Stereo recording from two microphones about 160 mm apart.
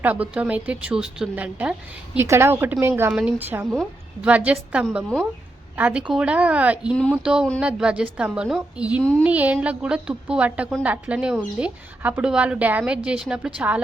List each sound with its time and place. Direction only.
0.0 s speech: 10° right (ahead or behind)
6.9 s a woman's voice: 5° left (ahead or behind)
7.2 s a woman's voice: 5° right (ahead or behind)